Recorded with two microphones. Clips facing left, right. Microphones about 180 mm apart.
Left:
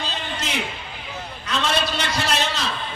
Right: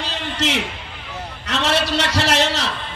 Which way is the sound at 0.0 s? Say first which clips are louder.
Right 5 dB; 85° right.